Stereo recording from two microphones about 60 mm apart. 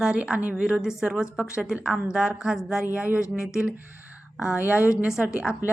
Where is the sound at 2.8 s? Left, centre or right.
Right.